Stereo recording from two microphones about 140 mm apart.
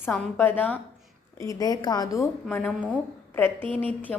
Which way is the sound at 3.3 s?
15° left (ahead or behind).